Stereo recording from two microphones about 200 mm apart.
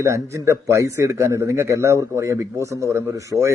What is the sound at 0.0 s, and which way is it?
Speech, 15° right (ahead or behind).